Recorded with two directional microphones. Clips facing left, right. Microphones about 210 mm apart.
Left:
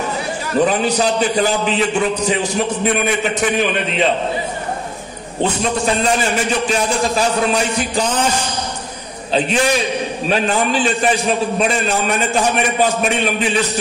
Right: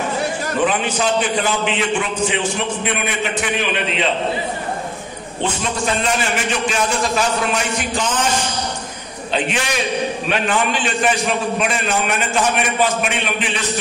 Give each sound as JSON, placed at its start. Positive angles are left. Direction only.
{"t": 0.6, "sound": "a man's voice", "side_deg": 40}
{"t": 6.7, "sound": "a man's voice", "side_deg": 35}